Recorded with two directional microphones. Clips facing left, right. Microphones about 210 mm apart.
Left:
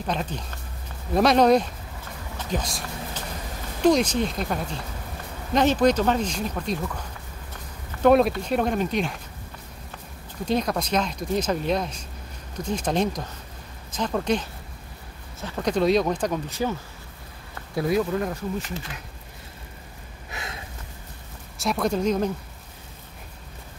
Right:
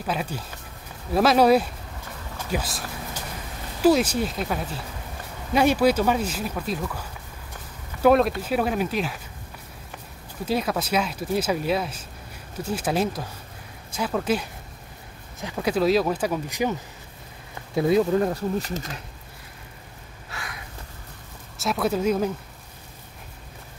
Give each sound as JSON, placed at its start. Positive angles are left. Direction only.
{"t": 0.0, "sound": "speech", "side_deg": -5}
{"t": 3.8, "sound": "speech", "side_deg": -5}
{"t": 10.4, "sound": "speech", "side_deg": -5}
{"t": 17.7, "sound": "speech", "side_deg": -25}
{"t": 20.2, "sound": "a sound", "side_deg": 20}
{"t": 21.5, "sound": "speech", "side_deg": 0}